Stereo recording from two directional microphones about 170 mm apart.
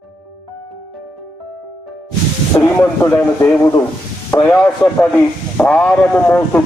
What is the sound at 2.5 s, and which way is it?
A man's voice, 15° left (ahead or behind).